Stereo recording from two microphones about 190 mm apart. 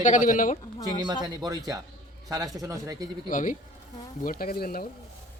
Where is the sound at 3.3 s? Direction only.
45° left (ahead or behind).